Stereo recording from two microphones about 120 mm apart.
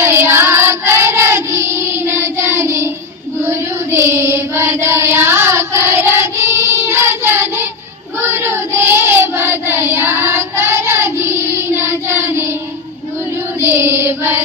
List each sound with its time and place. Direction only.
0.0 s child singing: 20° right (ahead or behind)
13.6 s child singing: 20° right (ahead or behind)